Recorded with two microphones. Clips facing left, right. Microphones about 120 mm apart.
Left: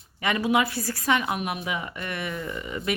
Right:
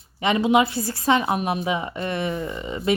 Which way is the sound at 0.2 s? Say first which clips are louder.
Right 5 dB; 25° right (ahead or behind).